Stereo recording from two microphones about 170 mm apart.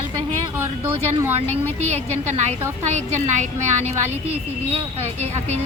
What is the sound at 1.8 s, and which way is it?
A woman's voice, 40° right (ahead or behind).